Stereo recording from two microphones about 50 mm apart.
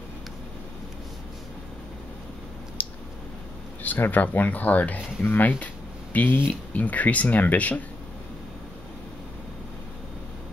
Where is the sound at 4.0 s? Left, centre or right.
Left.